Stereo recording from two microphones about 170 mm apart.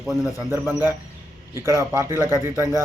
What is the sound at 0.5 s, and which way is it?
Speech, 15° right (ahead or behind).